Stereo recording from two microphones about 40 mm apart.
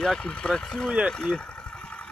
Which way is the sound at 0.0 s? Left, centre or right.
Centre.